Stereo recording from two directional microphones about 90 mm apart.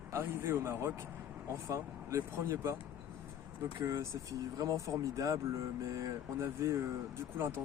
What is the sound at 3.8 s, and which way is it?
Speech, 35° right (ahead or behind).